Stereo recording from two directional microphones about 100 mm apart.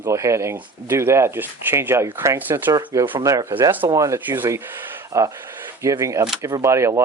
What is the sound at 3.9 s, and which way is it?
Speech, 35° right (ahead or behind).